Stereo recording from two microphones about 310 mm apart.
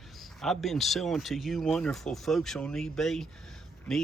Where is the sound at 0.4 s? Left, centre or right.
Centre.